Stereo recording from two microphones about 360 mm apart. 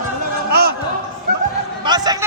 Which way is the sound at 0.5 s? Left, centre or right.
Right.